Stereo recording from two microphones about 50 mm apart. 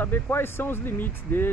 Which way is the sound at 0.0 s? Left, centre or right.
Left.